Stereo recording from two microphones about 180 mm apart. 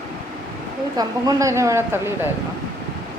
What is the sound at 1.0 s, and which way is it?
A woman's voice, 20° right (ahead or behind).